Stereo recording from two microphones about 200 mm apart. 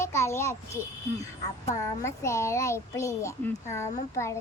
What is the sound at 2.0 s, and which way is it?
A child's voice, 15° left (ahead or behind).